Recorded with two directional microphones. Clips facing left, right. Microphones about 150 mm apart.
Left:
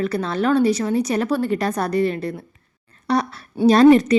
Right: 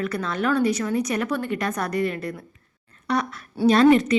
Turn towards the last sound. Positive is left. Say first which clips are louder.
# left 4 dB
turn(degrees=35)  # may be behind; listen again after turning